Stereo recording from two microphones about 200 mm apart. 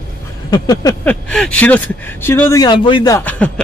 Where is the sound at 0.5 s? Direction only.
20° left (ahead or behind).